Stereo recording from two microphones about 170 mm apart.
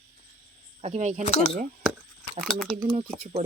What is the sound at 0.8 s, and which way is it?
Speech, 40° right (ahead or behind).